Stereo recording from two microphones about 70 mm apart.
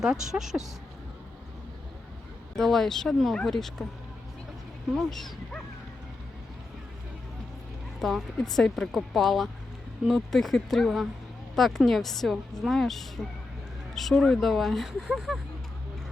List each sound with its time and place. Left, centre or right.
0.0 s a woman's voice: centre
2.6 s a woman's voice: centre
4.9 s speech: centre
8.0 s a woman's voice: centre